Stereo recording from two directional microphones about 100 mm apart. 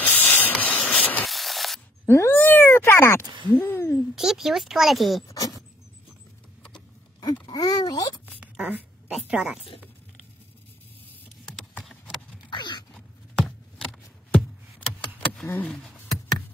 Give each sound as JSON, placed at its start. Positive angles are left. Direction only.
{"t": 0.0, "sound": "hiss", "side_deg": 15}
{"t": 1.2, "sound": "a sound", "side_deg": 0}
{"t": 2.0, "sound": "cat", "side_deg": 25}
{"t": 3.3, "sound": "a sound", "side_deg": -55}
{"t": 3.5, "sound": "a sound", "side_deg": 20}
{"t": 4.1, "sound": "speech", "side_deg": -5}
{"t": 5.3, "sound": "dog", "side_deg": 40}
{"t": 7.5, "sound": "speech", "side_deg": 40}
{"t": 8.5, "sound": "a woman's voice", "side_deg": -15}
{"t": 11.4, "sound": "typing", "side_deg": 10}
{"t": 12.4, "sound": "a sound", "side_deg": 50}
{"t": 15.4, "sound": "speech", "side_deg": 15}